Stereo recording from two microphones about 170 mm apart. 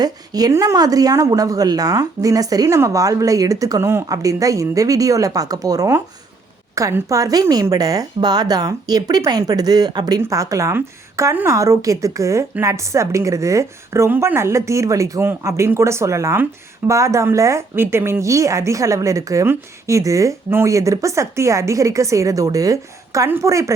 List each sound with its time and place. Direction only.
0.0 s speech: 20° right (ahead or behind)